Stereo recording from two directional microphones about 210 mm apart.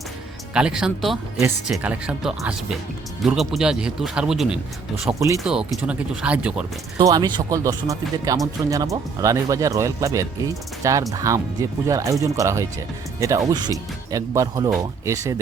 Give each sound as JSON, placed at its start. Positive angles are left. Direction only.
{"t": 0.5, "sound": "speech", "side_deg": -5}
{"t": 7.1, "sound": "speech", "side_deg": -20}